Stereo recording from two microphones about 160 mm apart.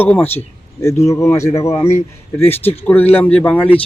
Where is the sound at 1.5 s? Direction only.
40° left (ahead or behind).